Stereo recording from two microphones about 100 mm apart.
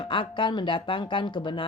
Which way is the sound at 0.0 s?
60° left (ahead or behind).